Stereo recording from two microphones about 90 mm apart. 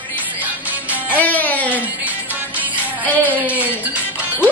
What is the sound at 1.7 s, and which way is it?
Music, 15° right (ahead or behind).